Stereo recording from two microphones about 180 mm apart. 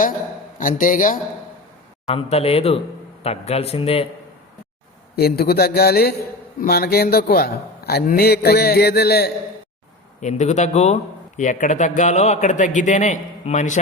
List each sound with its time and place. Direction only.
0.8 s a man's voice: 45° left (ahead or behind)
2.0 s speech: 35° left (ahead or behind)
5.1 s a man's voice: 60° left (ahead or behind)
10.2 s a man's voice: 40° left (ahead or behind)